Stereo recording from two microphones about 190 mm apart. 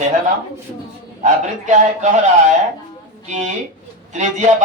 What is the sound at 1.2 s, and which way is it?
Speech, 40° right (ahead or behind).